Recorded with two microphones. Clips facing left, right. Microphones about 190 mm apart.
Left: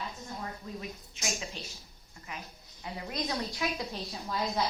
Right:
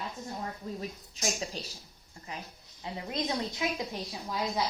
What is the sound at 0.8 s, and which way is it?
A woman's voice, 35° right (ahead or behind).